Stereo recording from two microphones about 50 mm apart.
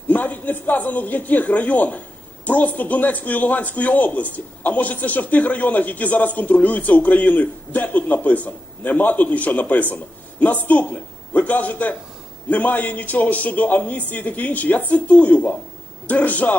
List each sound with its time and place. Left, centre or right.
0.1 s a man's voice: left